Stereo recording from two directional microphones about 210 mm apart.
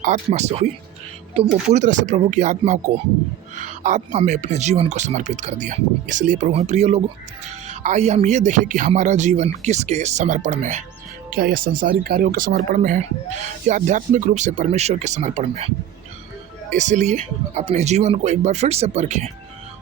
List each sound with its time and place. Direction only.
0.0 s speech: 35° right (ahead or behind)
16.7 s speech: 35° right (ahead or behind)